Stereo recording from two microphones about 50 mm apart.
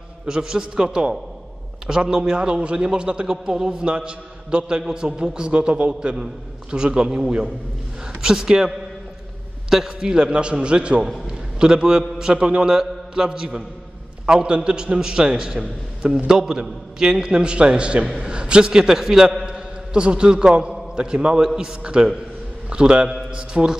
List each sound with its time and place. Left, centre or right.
0.3 s a man's voice: centre
9.9 s a man's voice: centre
23.0 s a man's voice: centre